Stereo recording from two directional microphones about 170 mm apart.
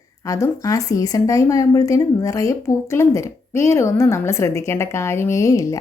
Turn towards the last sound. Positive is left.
turn(degrees=20)  # may be behind; listen again after turning